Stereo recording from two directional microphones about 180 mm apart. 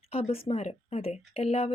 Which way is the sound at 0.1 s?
30° left (ahead or behind).